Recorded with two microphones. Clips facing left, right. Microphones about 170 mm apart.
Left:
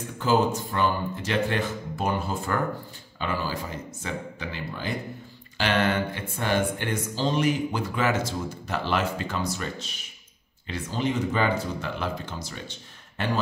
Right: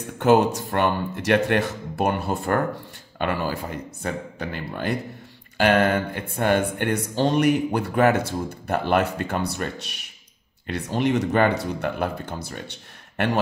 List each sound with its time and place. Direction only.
0.2 s speech: 70° right (ahead or behind)
5.6 s mantra: 50° right (ahead or behind)
6.8 s speech: 65° right (ahead or behind)